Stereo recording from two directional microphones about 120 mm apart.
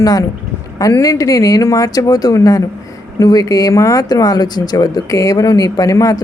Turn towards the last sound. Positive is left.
turn(degrees=30)  # may be behind; listen again after turning